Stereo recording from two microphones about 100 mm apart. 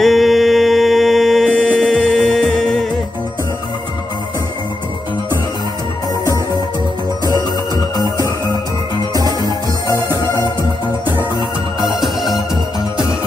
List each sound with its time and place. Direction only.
0.0 s music: centre (ahead or behind)
1.5 s music: 15° left (ahead or behind)
9.4 s music: 35° left (ahead or behind)